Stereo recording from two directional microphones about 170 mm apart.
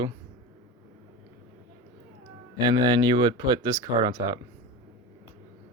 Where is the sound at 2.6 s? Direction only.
25° right (ahead or behind).